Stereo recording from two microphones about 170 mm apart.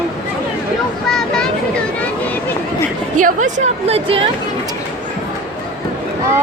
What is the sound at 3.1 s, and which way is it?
A woman's voice, 50° right (ahead or behind).